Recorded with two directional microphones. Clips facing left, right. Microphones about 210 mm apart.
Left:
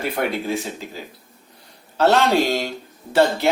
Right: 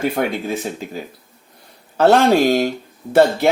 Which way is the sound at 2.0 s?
50° right (ahead or behind).